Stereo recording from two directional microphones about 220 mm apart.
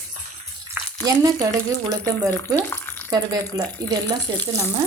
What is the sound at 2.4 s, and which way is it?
Speech, 10° left (ahead or behind).